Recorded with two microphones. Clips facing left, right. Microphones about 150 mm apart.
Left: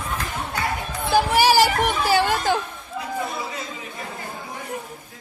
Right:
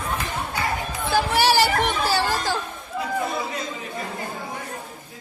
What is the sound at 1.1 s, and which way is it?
Music, 10° left (ahead or behind).